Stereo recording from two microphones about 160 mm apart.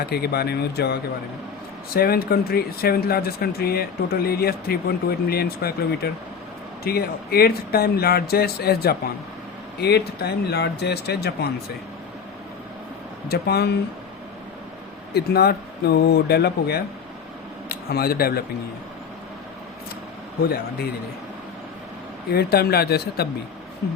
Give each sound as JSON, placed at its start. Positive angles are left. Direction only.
{"t": 0.0, "sound": "speech", "side_deg": 80}
{"t": 1.9, "sound": "speech", "side_deg": 70}
{"t": 9.8, "sound": "speech", "side_deg": 90}
{"t": 13.2, "sound": "speech", "side_deg": 75}
{"t": 15.1, "sound": "speech", "side_deg": 85}
{"t": 17.7, "sound": "speech", "side_deg": 75}
{"t": 22.3, "sound": "speech", "side_deg": 80}